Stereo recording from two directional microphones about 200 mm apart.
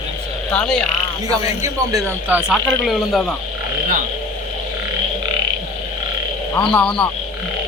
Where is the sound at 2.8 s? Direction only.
Centre (ahead or behind).